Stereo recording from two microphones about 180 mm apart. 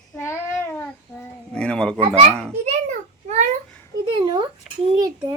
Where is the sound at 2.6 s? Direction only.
40° right (ahead or behind).